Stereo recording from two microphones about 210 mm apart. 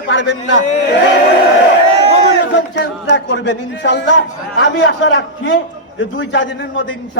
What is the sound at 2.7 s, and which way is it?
A man's voice, 60° left (ahead or behind).